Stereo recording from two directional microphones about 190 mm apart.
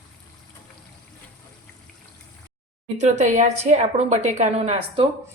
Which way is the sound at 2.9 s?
40° right (ahead or behind).